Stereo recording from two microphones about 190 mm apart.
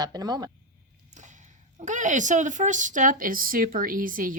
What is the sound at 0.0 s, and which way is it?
Speech, 20° right (ahead or behind).